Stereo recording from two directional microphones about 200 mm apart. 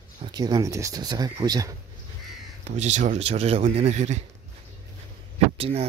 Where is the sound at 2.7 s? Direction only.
35° right (ahead or behind).